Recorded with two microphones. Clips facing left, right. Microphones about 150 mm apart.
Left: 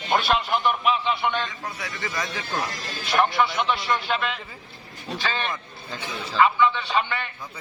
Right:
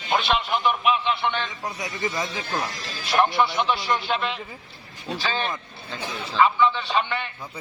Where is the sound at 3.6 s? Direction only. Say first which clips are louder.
Right 1 dB; centre (ahead or behind).